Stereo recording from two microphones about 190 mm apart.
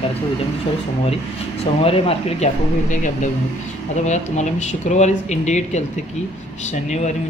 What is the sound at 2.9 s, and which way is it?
A man's voice, 40° left (ahead or behind).